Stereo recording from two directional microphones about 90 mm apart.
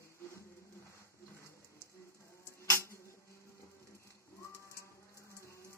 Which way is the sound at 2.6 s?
30° left (ahead or behind).